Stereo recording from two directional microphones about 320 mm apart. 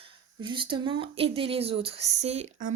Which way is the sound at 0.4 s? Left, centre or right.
Centre.